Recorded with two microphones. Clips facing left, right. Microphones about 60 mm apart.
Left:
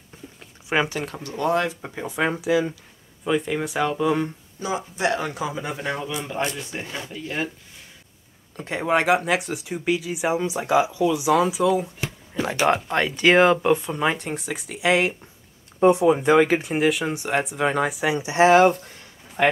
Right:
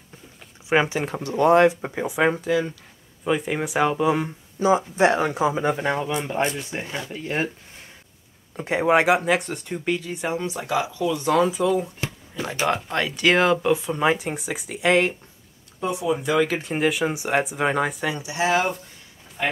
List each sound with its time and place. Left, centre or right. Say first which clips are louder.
0.7 s speech: right 3 dB; centre
1.7 s speech: right 5 dB; centre
2.4 s speech: left 1 dB; centre
3.3 s speech: even; centre
4.6 s speech: right 8 dB; right
8.5 s speech: right 3 dB; centre
15.8 s speech: left 8 dB; left
16.3 s speech: left 4 dB; centre
16.6 s speech: left 1 dB; centre
18.1 s speech: left 9 dB; left